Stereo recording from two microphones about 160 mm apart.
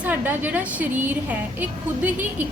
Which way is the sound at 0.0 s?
10° right (ahead or behind).